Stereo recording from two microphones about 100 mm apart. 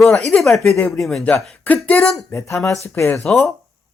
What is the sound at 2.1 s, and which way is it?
Speech, 30° left (ahead or behind).